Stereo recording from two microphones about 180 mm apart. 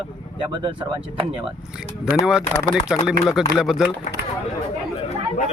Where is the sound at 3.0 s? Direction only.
Centre (ahead or behind).